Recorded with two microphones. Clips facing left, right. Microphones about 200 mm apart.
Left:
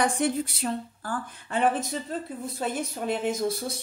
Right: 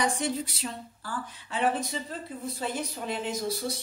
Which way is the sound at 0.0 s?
55° left (ahead or behind).